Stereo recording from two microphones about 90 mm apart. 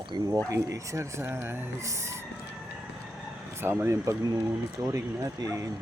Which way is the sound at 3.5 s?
25° right (ahead or behind).